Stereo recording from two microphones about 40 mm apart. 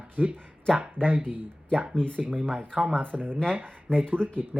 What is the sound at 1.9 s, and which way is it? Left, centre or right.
Speech, left.